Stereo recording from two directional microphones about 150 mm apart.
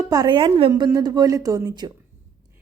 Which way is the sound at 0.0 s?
25° right (ahead or behind).